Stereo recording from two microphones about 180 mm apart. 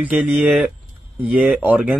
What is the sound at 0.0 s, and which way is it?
Speech, 5° right (ahead or behind).